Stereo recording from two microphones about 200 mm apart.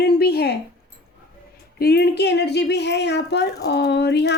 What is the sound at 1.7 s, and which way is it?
A woman's voice, 50° left (ahead or behind).